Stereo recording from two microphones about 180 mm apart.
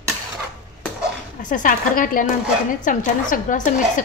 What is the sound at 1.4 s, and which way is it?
A woman's voice, 50° left (ahead or behind).